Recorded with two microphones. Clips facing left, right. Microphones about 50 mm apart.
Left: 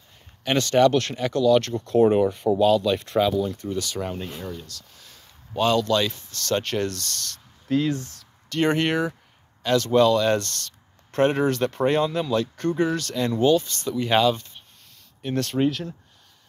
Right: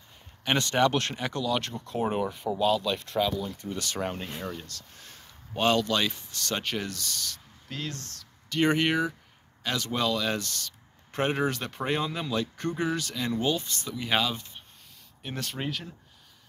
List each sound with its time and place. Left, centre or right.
0.4 s speech: centre
2.0 s speech: centre
3.7 s speech: right
4.0 s speech: right
5.8 s speech: centre
6.5 s speech: centre
7.6 s speech: centre
8.5 s speech: centre
9.7 s speech: centre
10.0 s speech: centre